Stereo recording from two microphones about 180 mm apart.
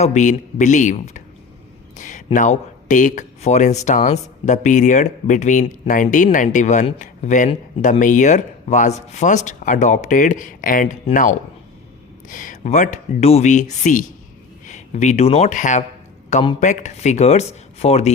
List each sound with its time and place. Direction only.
0.0 s speech: 40° left (ahead or behind)